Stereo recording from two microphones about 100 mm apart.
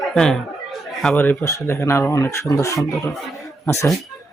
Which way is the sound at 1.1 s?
20° left (ahead or behind).